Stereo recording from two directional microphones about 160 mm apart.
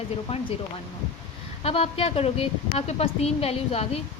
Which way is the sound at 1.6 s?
35° left (ahead or behind).